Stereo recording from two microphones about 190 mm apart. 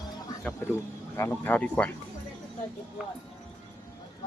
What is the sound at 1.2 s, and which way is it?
Speech, 10° left (ahead or behind).